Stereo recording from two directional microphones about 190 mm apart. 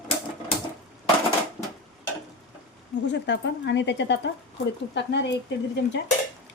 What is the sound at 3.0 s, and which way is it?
A woman's voice, 65° left (ahead or behind).